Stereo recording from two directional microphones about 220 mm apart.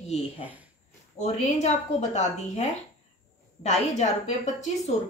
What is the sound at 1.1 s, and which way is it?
A woman's voice, 30° left (ahead or behind).